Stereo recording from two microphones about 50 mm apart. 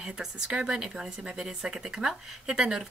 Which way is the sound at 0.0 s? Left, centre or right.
Centre.